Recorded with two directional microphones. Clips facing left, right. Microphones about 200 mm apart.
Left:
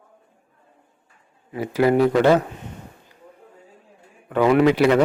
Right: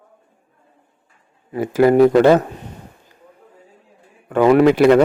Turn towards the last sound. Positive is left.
turn(degrees=-50)  # may be behind; listen again after turning